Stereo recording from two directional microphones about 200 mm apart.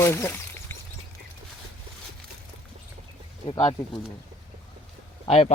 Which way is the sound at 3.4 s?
25° left (ahead or behind).